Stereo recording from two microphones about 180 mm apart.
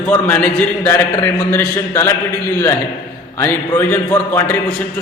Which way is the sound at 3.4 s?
10° left (ahead or behind).